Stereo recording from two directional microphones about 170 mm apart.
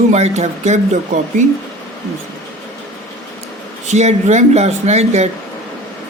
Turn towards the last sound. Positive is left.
turn(degrees=-40)  # may be behind; listen again after turning